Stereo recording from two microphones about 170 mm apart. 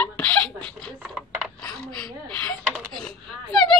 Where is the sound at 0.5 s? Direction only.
5° left (ahead or behind).